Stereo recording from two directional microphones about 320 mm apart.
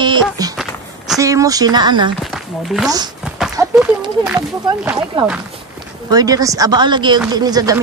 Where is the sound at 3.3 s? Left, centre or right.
Centre.